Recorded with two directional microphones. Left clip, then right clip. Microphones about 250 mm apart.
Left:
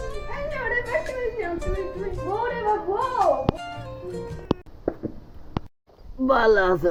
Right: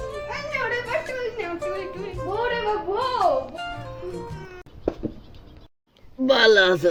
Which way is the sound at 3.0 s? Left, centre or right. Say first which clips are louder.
Right 3 dB; centre.